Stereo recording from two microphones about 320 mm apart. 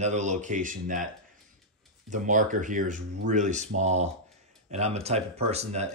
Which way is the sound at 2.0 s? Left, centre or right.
Right.